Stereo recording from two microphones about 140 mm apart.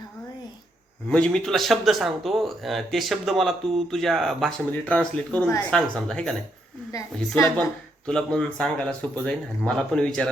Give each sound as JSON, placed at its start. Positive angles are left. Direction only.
{"t": 1.0, "sound": "speech", "side_deg": 10}
{"t": 6.9, "sound": "a woman's voice", "side_deg": 25}
{"t": 8.0, "sound": "speech", "side_deg": 5}